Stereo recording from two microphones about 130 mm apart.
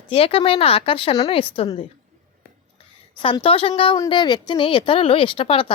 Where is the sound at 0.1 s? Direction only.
45° left (ahead or behind).